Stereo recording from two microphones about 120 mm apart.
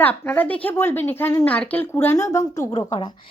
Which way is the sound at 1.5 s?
10° left (ahead or behind).